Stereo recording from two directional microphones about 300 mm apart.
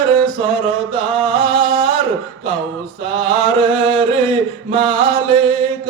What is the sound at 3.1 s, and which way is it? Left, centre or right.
Chant, centre.